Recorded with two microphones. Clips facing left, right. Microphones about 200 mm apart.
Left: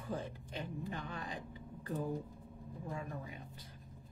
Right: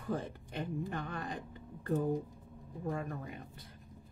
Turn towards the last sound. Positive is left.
turn(degrees=-60)  # may be behind; listen again after turning